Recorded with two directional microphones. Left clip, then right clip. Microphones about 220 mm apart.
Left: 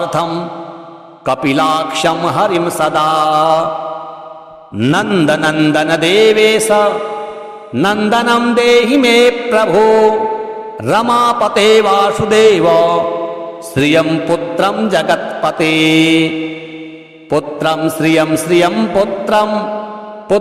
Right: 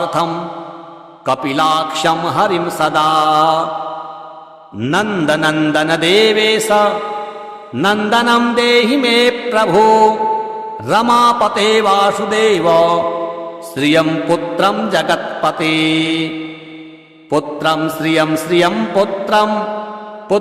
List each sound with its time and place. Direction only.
0.0 s a man's voice: 25° left (ahead or behind)
4.8 s a man's voice: 30° left (ahead or behind)